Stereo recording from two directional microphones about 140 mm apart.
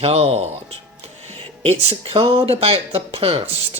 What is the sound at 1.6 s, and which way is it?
Speech, 40° right (ahead or behind).